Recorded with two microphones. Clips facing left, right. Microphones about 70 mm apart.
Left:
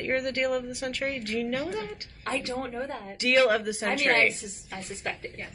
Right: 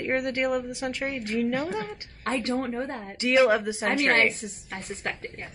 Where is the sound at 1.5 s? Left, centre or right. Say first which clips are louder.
Right 2 dB; right.